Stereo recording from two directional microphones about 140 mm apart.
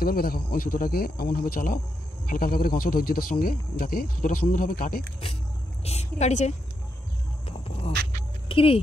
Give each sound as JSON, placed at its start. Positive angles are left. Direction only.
{"t": 0.0, "sound": "speech", "side_deg": 90}
{"t": 5.9, "sound": "a woman's voice", "side_deg": 50}
{"t": 7.4, "sound": "a sound", "side_deg": 45}
{"t": 8.5, "sound": "speech", "side_deg": 40}